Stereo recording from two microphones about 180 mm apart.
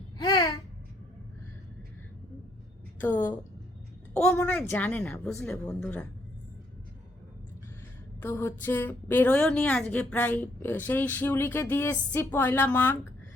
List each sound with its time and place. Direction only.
0.2 s babbling: 20° left (ahead or behind)
3.0 s a woman's voice: 10° left (ahead or behind)
8.2 s a woman's voice: 10° left (ahead or behind)